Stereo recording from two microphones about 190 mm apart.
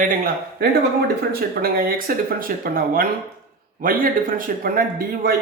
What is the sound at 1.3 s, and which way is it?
Speech, 50° right (ahead or behind).